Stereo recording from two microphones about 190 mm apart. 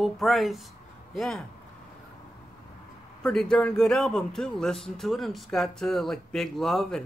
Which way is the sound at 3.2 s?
5° left (ahead or behind).